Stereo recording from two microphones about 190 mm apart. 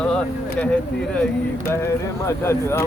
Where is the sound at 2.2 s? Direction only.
15° left (ahead or behind).